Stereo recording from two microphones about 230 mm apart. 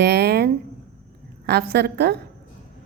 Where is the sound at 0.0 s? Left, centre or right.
Right.